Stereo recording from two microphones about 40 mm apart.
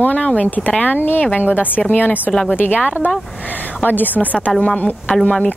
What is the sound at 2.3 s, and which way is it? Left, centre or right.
Speech, left.